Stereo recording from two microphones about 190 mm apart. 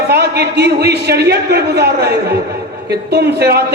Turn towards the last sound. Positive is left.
turn(degrees=-60)  # may be behind; listen again after turning